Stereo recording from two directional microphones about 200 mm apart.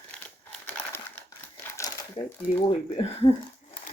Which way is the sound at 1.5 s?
20° left (ahead or behind).